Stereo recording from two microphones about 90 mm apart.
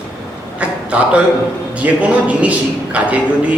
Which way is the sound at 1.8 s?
15° right (ahead or behind).